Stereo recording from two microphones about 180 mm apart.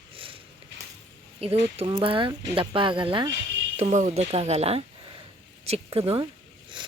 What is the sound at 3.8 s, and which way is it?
Speech, 40° right (ahead or behind).